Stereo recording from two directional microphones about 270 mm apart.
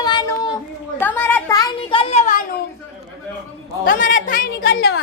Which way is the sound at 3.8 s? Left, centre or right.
Left.